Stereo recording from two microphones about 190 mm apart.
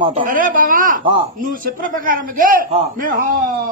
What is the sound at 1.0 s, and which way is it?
Speech, 30° right (ahead or behind).